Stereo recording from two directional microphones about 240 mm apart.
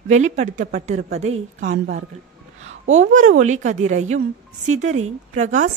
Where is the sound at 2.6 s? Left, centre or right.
Right.